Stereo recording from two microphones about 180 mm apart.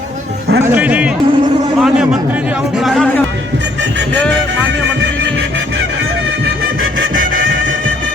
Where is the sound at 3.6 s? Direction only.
80° right.